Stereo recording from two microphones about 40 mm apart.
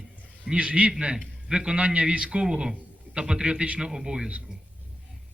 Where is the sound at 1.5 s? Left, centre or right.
Right.